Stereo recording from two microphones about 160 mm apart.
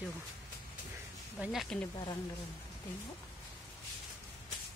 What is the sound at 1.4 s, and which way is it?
Speech, centre (ahead or behind).